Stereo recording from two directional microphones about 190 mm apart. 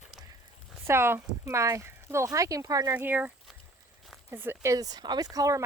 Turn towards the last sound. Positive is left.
turn(degrees=-20)  # may be behind; listen again after turning